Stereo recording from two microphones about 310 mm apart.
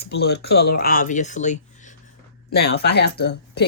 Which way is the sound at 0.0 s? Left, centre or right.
Left.